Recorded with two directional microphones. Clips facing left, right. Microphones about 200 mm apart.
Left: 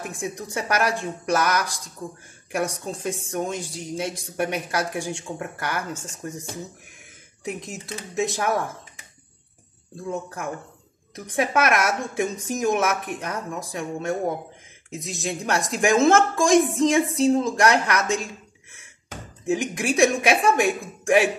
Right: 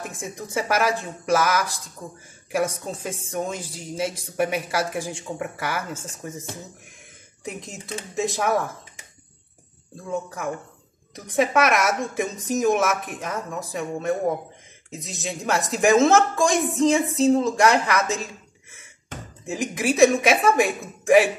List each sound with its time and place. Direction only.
0.1 s a woman's voice: centre (ahead or behind)
7.4 s a woman's voice: centre (ahead or behind)
11.1 s a woman's voice: centre (ahead or behind)